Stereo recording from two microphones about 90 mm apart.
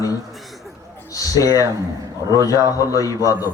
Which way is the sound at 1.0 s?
40° left (ahead or behind).